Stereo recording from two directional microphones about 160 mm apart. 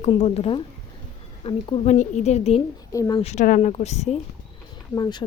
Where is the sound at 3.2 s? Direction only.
40° left (ahead or behind).